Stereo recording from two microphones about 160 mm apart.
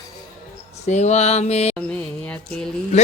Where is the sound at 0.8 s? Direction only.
45° left (ahead or behind).